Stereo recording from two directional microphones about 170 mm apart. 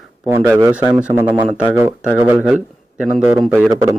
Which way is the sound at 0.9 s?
5° right (ahead or behind).